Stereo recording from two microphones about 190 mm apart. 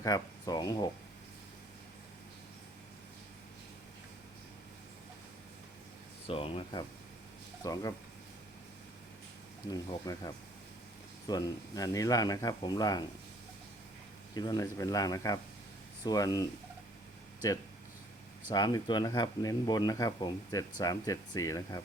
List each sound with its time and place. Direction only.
0.0 s speech: 20° left (ahead or behind)
6.2 s speech: 30° left (ahead or behind)
7.6 s speech: 20° left (ahead or behind)
9.6 s speech: 20° left (ahead or behind)
14.3 s speech: 20° left (ahead or behind)
18.5 s speech: 20° left (ahead or behind)